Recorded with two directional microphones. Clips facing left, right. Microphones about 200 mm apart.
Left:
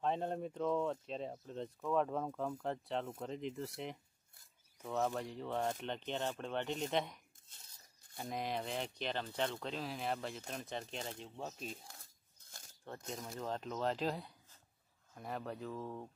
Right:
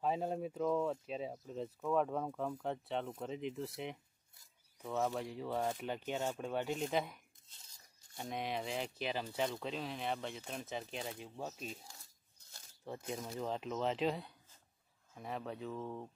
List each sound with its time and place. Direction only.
0.0 s speech: 5° right (ahead or behind)
7.4 s cutlery: 55° left (ahead or behind)
8.2 s speech: centre (ahead or behind)
11.9 s a sound: 55° left (ahead or behind)
12.8 s speech: 5° right (ahead or behind)